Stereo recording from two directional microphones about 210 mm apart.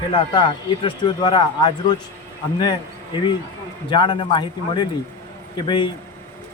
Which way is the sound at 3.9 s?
25° left (ahead or behind).